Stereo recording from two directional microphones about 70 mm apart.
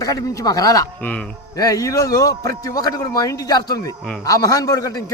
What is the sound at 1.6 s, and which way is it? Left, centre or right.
A man's voice, left.